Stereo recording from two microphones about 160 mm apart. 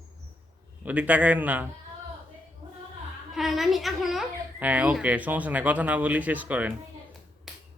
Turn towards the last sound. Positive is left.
turn(degrees=0)  # may be behind; listen again after turning